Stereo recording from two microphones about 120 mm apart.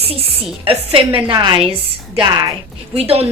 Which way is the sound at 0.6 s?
50° right (ahead or behind).